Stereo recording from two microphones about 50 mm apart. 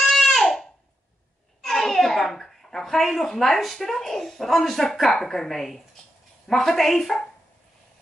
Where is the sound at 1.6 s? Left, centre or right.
Centre.